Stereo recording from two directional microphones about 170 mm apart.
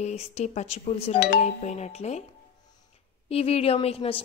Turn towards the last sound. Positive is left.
turn(degrees=35)  # may be behind; listen again after turning